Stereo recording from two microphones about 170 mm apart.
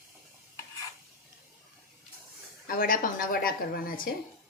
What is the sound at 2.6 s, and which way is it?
Speech, 55° left (ahead or behind).